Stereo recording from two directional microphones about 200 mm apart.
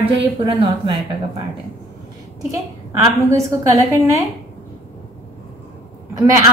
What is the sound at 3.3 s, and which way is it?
Speech, 15° right (ahead or behind).